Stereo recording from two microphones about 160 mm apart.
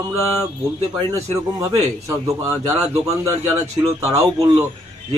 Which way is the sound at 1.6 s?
20° right (ahead or behind).